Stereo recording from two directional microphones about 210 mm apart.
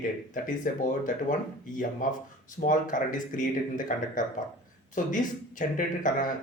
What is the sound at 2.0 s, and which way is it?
Speech, 40° left (ahead or behind).